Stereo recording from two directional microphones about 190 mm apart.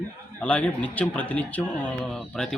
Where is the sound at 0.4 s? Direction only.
5° left (ahead or behind).